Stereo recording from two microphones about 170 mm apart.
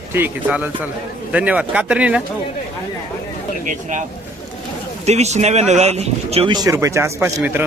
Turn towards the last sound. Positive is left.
turn(degrees=-10)  # may be behind; listen again after turning